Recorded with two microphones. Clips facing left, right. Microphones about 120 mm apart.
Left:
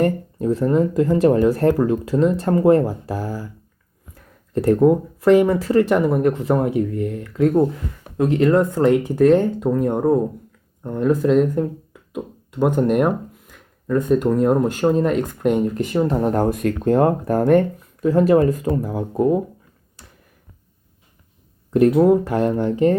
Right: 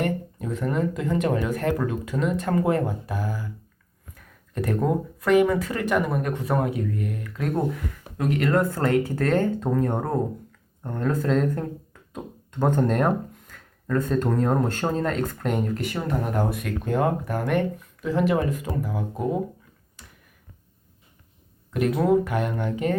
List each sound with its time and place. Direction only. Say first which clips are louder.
0.0 s speech: left 8 dB; 35° left (ahead or behind)
16.4 s speech: left 8 dB; 45° left (ahead or behind)
21.7 s speech: left 7 dB; 30° left (ahead or behind)